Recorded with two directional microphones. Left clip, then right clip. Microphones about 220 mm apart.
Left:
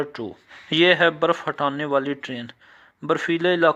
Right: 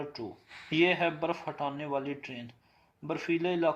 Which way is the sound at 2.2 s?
55° left (ahead or behind).